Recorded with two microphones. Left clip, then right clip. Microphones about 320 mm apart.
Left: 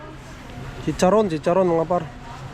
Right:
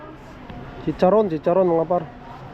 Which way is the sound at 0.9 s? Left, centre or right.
Centre.